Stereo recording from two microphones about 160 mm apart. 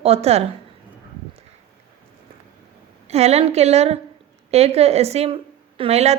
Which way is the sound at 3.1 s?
40° right (ahead or behind).